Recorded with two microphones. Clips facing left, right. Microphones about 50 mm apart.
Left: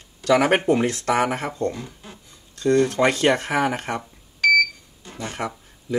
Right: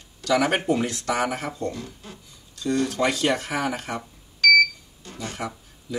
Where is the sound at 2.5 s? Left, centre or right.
Left.